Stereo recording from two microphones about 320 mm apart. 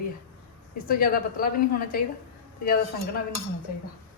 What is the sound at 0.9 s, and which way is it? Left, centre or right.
A woman's voice, left.